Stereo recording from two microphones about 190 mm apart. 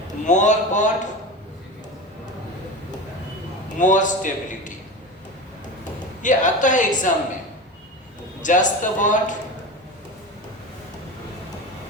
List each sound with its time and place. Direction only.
0.3 s a man's voice: 40° left (ahead or behind)
3.8 s a man's voice: 40° left (ahead or behind)
6.2 s a man's voice: 40° left (ahead or behind)
8.4 s a man's voice: 40° left (ahead or behind)